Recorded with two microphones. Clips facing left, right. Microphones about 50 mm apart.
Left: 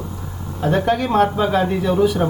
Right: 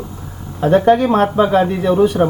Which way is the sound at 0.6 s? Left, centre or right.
Right.